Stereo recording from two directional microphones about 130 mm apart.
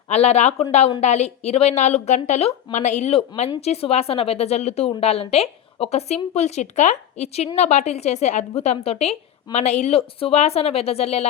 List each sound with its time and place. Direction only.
0.1 s a woman's voice: 55° left (ahead or behind)